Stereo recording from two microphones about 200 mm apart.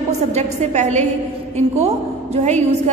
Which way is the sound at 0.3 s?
35° right (ahead or behind).